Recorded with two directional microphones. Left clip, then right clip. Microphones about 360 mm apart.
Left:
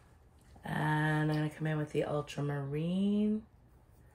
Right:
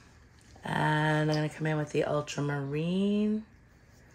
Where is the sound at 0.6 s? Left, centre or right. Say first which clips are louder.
Right 5 dB; right.